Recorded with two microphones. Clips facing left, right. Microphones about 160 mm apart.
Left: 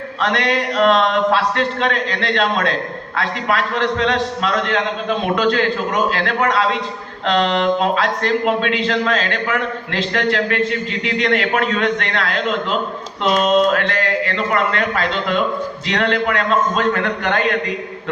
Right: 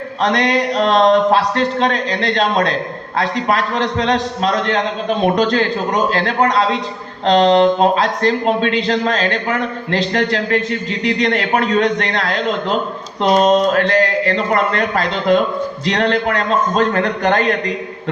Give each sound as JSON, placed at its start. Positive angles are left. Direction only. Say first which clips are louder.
{"t": 0.2, "sound": "speech", "louder": "right 3 dB", "side_deg": -40}